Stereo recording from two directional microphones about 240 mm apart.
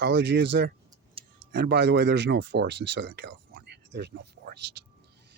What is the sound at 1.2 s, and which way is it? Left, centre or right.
Tick-tock, right.